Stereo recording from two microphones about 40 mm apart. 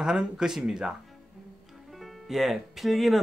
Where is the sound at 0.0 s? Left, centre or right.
Centre.